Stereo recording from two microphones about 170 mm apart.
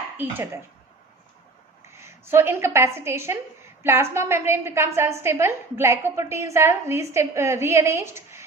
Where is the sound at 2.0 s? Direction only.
15° right (ahead or behind).